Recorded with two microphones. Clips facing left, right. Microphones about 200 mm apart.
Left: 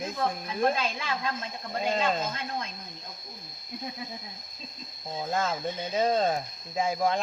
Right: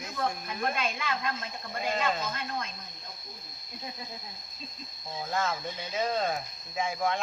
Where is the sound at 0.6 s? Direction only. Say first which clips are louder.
Left 5 dB; 30° left (ahead or behind).